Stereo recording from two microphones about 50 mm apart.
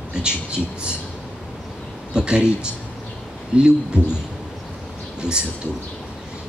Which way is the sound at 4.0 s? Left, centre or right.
Left.